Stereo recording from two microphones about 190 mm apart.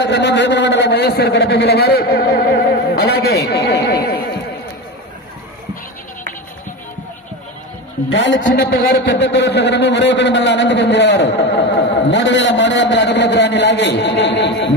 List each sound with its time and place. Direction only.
0.0 s a sound: 65° left (ahead or behind)
8.1 s a man's voice: 70° left (ahead or behind)
8.5 s a man's voice: 60° left (ahead or behind)